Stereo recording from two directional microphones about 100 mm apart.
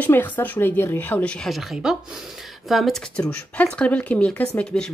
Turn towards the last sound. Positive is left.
turn(degrees=10)  # may be behind; listen again after turning